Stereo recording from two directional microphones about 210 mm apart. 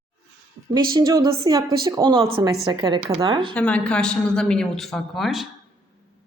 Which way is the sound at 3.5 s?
5° left (ahead or behind).